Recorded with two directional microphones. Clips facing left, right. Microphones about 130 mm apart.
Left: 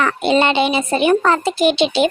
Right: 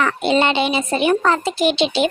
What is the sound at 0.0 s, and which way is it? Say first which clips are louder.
Speech: left 2 dB; 55° left (ahead or behind).